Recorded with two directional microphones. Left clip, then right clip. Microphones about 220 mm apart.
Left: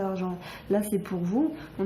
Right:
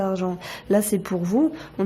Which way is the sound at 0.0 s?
45° right (ahead or behind).